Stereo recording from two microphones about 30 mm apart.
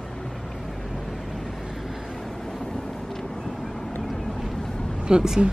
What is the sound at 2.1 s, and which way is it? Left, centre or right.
Vehicle, centre.